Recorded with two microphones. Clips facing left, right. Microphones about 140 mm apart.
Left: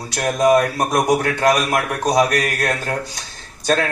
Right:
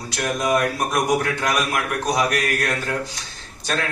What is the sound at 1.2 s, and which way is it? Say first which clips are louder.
Speech: left 5 dB; 55° left (ahead or behind).